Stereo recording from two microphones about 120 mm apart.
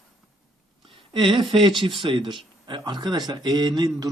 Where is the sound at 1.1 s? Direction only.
45° right (ahead or behind).